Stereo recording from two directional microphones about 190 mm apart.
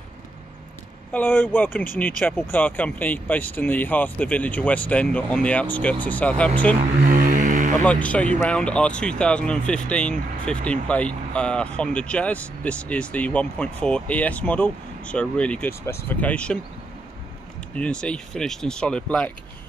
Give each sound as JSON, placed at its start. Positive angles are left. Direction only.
{"t": 1.1, "sound": "speech", "side_deg": 10}
{"t": 7.0, "sound": "mantra", "side_deg": -45}
{"t": 7.8, "sound": "speech", "side_deg": 5}
{"t": 17.7, "sound": "speech", "side_deg": 5}